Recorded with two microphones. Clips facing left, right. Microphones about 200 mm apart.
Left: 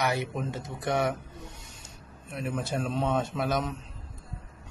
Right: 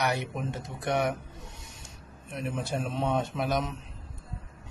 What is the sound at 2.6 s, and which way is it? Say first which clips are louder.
Speech: left 1 dB; 15° right (ahead or behind).